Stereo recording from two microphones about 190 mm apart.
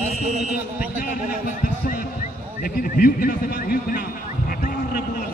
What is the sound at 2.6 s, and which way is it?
A man's voice, 50° left (ahead or behind).